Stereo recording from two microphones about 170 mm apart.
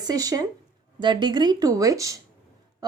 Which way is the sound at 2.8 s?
25° right (ahead or behind).